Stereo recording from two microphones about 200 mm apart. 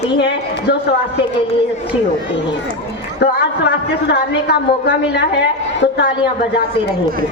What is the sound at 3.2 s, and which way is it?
A woman's voice, 55° left (ahead or behind).